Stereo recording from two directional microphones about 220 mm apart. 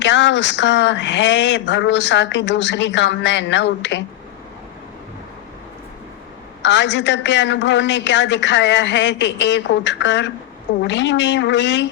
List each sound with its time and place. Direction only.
0.0 s speech: 55° left (ahead or behind)
6.6 s speech: 55° left (ahead or behind)